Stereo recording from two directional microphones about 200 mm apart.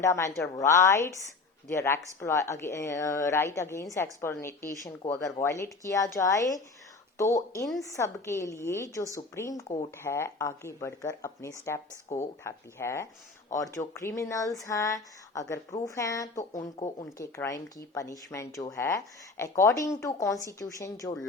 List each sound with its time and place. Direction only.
0.0 s speech: 15° left (ahead or behind)